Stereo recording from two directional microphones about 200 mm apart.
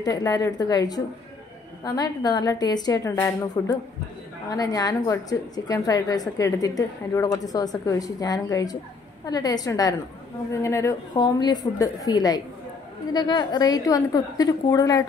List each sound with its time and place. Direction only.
0.0 s a woman's voice: 20° left (ahead or behind)